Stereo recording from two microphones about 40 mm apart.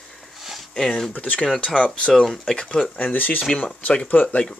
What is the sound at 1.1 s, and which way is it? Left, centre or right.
Speech, left.